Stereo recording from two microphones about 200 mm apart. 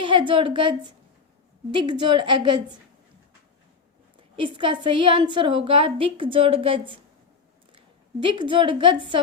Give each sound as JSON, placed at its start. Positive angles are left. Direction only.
{"t": 0.0, "sound": "a woman's voice", "side_deg": -25}
{"t": 4.4, "sound": "a woman's voice", "side_deg": -25}
{"t": 8.2, "sound": "a woman's voice", "side_deg": -25}